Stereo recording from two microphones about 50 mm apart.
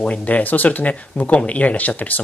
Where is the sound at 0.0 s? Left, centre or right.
Left.